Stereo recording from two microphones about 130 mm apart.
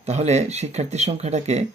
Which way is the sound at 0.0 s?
55° right (ahead or behind).